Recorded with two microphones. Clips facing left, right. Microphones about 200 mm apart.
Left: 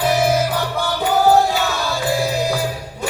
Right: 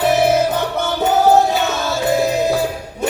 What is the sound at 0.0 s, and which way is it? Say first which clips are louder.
Music: right 3 dB; 20° right (ahead or behind).